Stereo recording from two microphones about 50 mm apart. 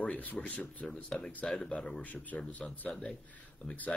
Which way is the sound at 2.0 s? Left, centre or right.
Left.